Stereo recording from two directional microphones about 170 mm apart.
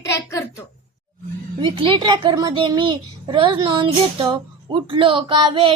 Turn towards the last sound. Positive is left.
turn(degrees=-30)  # may be behind; listen again after turning